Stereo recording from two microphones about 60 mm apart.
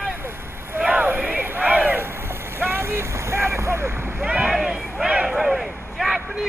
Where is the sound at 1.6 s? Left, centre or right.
Right.